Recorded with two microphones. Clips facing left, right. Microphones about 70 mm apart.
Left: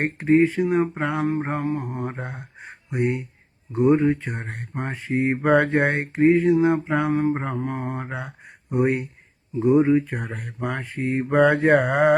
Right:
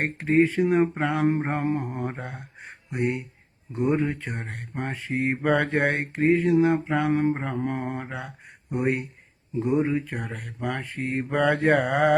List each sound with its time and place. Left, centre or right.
0.0 s speech: centre
0.3 s a sound: centre
1.9 s speech: centre
2.9 s speech: centre
5.4 s speech: centre
7.1 s a sound: centre
8.7 s speech: centre